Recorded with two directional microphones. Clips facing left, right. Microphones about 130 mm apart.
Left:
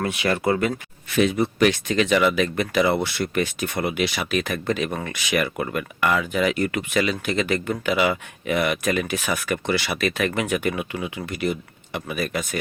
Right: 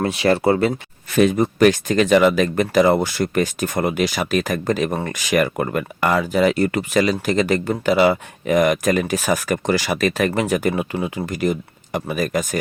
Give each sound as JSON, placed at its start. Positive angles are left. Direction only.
{"t": 0.0, "sound": "speech", "side_deg": -35}